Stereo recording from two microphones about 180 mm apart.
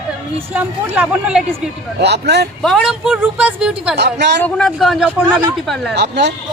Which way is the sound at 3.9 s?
75° right (ahead or behind).